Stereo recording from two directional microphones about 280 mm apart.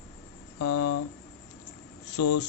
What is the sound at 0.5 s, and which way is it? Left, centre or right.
Speech, left.